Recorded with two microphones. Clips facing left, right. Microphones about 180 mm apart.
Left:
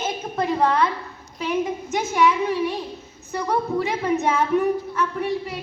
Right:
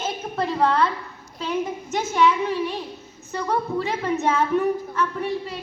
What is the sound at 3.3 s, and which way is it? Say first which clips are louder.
A woman's voice: left 1 dB; 10° left (ahead or behind).